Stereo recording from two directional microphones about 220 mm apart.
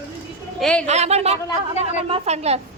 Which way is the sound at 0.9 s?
30° right (ahead or behind).